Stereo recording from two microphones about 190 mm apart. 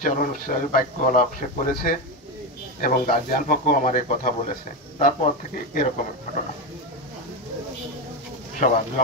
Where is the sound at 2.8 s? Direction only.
50° left (ahead or behind).